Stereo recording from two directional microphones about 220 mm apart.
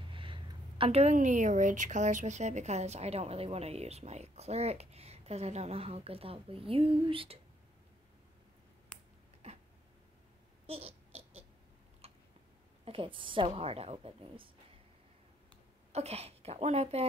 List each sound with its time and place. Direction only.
0.0 s a woman's voice: 25° right (ahead or behind)
9.4 s a sound: 30° right (ahead or behind)
10.7 s babbling: 25° right (ahead or behind)
12.0 s tick-tock: 30° right (ahead or behind)
12.8 s a woman's voice: 25° right (ahead or behind)
15.9 s a woman's voice: 30° right (ahead or behind)